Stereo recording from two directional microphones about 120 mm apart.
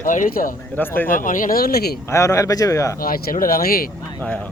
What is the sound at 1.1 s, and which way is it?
Speech, 90° left.